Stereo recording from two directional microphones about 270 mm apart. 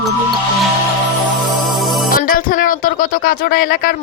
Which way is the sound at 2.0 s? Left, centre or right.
Left.